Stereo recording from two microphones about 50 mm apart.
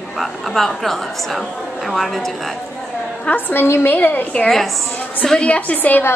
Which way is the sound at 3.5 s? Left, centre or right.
Left.